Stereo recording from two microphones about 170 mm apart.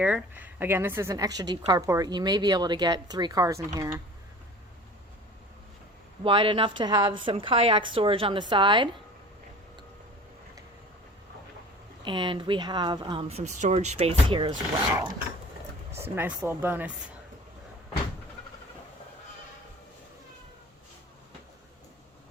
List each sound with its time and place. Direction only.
0.0 s a woman's voice: 5° right (ahead or behind)
6.2 s a woman's voice: 30° right (ahead or behind)
12.0 s a woman's voice: 30° right (ahead or behind)
16.1 s speech: 10° right (ahead or behind)